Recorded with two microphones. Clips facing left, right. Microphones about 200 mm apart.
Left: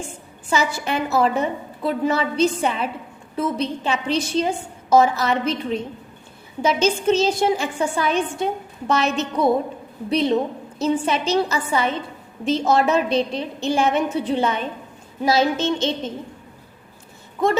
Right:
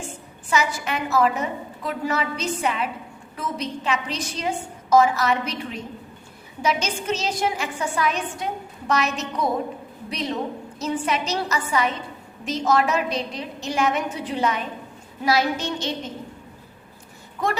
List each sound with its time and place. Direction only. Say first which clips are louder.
0.5 s a woman's voice: left 2 dB; 30° left (ahead or behind)